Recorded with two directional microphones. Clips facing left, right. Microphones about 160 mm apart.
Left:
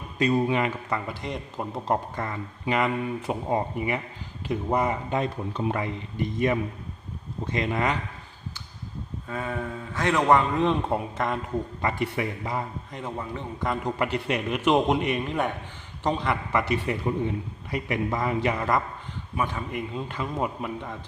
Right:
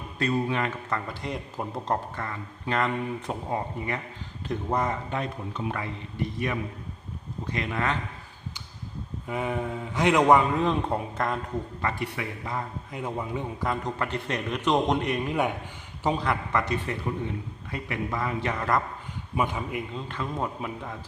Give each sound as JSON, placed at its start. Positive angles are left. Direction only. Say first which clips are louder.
{"t": 0.2, "sound": "a man's voice", "louder": "left 4 dB", "side_deg": 15}
{"t": 2.1, "sound": "speech", "louder": "left 3 dB", "side_deg": 20}
{"t": 2.7, "sound": "a man's voice", "louder": "left 1 dB", "side_deg": 5}
{"t": 5.2, "sound": "speech", "louder": "left 4 dB", "side_deg": 20}
{"t": 7.5, "sound": "speech", "louder": "left 3 dB", "side_deg": 20}
{"t": 9.2, "sound": "a man's voice", "louder": "right 2 dB", "side_deg": -15}
{"t": 11.8, "sound": "a man's voice", "louder": "left 5 dB", "side_deg": 20}
{"t": 12.9, "sound": "a man's voice", "louder": "right 5 dB", "side_deg": -10}
{"t": 13.7, "sound": "a man's voice", "louder": "left 4 dB", "side_deg": 10}
{"t": 18.4, "sound": "a man's voice", "louder": "left 1 dB", "side_deg": 10}
{"t": 19.4, "sound": "a man's voice", "louder": "right 1 dB", "side_deg": -15}
{"t": 20.0, "sound": "a man's voice", "louder": "left 4 dB", "side_deg": 10}
{"t": 20.6, "sound": "a man's voice", "louder": "left 2 dB", "side_deg": 0}